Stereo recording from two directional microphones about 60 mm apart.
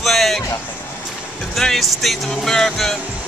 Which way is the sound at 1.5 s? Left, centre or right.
Centre.